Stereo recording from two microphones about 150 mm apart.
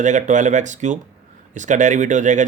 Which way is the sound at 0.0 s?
55° right (ahead or behind).